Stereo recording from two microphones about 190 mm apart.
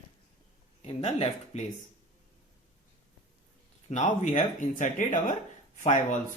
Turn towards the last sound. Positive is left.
turn(degrees=40)  # may be behind; listen again after turning